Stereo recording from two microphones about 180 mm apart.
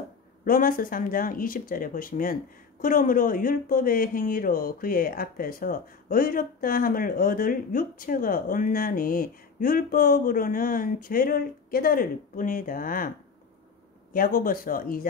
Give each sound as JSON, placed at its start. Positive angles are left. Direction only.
{"t": 0.5, "sound": "speech", "side_deg": 50}
{"t": 14.1, "sound": "speech", "side_deg": 50}